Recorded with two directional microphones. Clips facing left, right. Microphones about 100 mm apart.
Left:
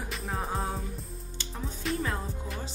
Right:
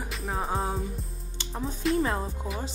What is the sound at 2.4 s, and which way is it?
Music, 5° right (ahead or behind).